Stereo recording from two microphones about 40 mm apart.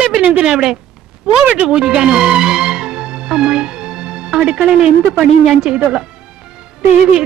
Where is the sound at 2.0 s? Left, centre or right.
Centre.